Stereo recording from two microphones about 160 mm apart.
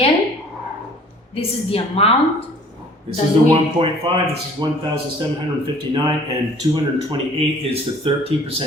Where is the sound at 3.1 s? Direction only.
35° right (ahead or behind).